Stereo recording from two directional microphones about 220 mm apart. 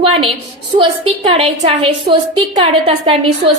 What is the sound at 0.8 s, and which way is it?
A woman's voice, 25° right (ahead or behind).